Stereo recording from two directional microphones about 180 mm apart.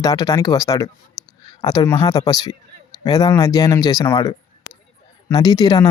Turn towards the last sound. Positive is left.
turn(degrees=20)  # may be behind; listen again after turning